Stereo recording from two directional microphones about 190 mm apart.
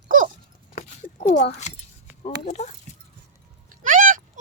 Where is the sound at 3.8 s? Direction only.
45° right (ahead or behind).